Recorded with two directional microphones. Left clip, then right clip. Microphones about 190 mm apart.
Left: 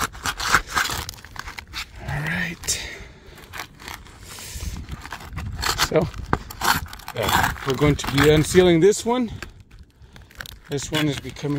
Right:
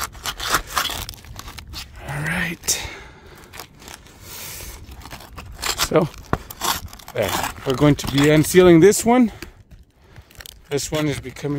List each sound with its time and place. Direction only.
0.0 s scrape: 5° right (ahead or behind)
1.7 s vehicle: 10° right (ahead or behind)
2.2 s whispering: 25° right (ahead or behind)
5.6 s a sound: 10° right (ahead or behind)
7.7 s speech: 30° right (ahead or behind)
10.7 s speech: 40° right (ahead or behind)